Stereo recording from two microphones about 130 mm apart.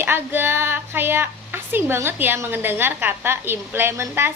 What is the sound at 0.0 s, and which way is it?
A woman's voice, 15° right (ahead or behind).